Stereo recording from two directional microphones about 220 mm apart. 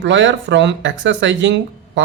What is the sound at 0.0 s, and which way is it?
A man's voice, 55° right (ahead or behind).